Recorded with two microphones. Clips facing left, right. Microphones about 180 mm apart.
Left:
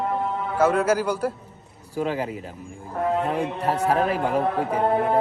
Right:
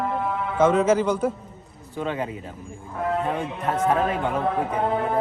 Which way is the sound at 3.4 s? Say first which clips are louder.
Left 1 dB; 35° left (ahead or behind).